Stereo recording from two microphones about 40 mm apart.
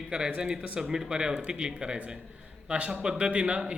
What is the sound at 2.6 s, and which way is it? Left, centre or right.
Speech, right.